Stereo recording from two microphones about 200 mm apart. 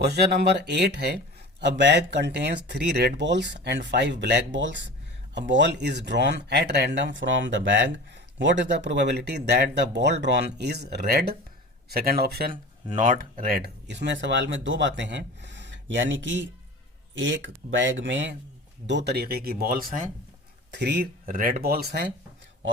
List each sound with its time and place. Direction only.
0.0 s speech: 55° right (ahead or behind)
12.9 s speech: 40° right (ahead or behind)
20.7 s speech: 55° right (ahead or behind)